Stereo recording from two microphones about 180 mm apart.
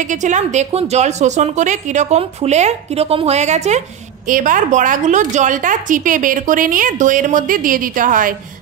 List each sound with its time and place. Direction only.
0.0 s a woman's voice: 45° right (ahead or behind)